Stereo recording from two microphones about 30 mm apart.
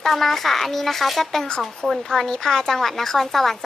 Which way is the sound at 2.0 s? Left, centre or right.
Centre.